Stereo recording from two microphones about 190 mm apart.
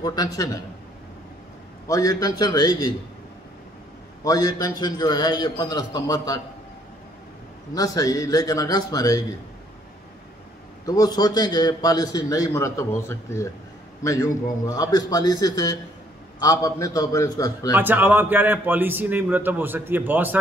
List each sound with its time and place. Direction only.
0.0 s a man's voice: 20° left (ahead or behind)
1.9 s a man's voice: 20° left (ahead or behind)
4.2 s a man's voice: 20° left (ahead or behind)
7.7 s a man's voice: 20° left (ahead or behind)
10.9 s a man's voice: 20° left (ahead or behind)
17.7 s a man's voice: 10° right (ahead or behind)